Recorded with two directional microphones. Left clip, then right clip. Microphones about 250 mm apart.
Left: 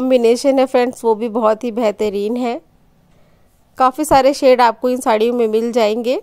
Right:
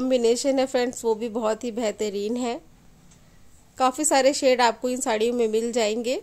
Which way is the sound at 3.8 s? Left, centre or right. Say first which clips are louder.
Left 9 dB; left.